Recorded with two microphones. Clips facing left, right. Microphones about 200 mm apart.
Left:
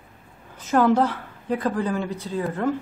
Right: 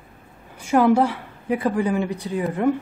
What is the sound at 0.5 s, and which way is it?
A woman's voice, 10° right (ahead or behind).